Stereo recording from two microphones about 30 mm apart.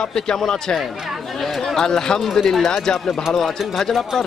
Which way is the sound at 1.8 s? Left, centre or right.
Centre.